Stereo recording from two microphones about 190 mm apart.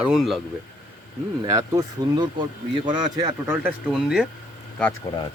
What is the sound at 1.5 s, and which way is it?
Speech, 20° right (ahead or behind).